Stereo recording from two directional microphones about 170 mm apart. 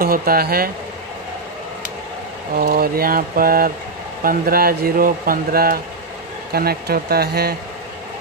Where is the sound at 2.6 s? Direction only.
60° right (ahead or behind).